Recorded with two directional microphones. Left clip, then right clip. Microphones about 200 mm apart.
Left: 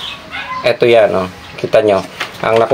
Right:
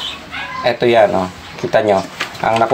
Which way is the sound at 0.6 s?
25° left (ahead or behind).